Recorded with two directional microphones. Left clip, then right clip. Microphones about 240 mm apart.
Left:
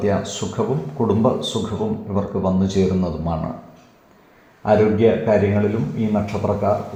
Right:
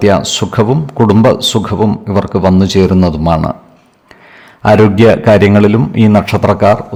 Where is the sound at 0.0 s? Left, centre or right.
Right.